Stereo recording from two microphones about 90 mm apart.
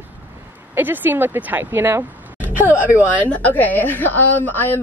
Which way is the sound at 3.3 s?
20° left (ahead or behind).